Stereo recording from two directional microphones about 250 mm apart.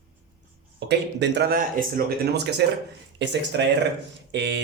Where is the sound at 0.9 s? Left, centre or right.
Right.